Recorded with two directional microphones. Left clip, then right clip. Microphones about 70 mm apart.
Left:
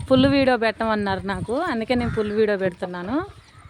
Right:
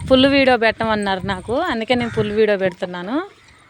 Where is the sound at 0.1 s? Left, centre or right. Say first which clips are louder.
Right 5 dB; centre.